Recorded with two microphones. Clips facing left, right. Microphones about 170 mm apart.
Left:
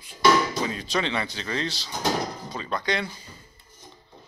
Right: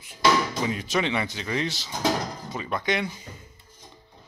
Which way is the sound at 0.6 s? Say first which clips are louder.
Right 1 dB; 20° right (ahead or behind).